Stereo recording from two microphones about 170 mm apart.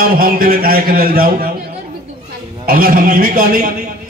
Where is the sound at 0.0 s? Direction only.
60° right (ahead or behind).